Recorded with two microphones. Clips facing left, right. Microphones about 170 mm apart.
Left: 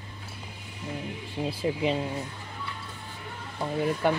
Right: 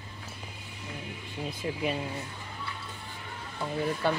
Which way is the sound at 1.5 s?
25° left (ahead or behind).